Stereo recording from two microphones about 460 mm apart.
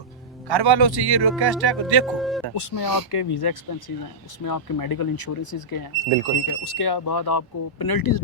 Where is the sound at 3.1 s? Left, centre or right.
Left.